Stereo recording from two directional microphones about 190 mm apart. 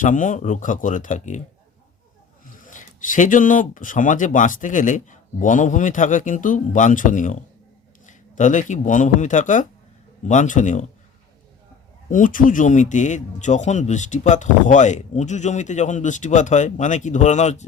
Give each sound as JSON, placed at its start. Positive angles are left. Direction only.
{"t": 0.0, "sound": "speech", "side_deg": 40}
{"t": 2.5, "sound": "speech", "side_deg": 45}
{"t": 12.0, "sound": "speech", "side_deg": 45}